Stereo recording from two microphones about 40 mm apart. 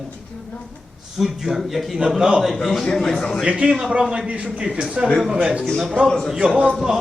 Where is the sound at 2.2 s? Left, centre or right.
Centre.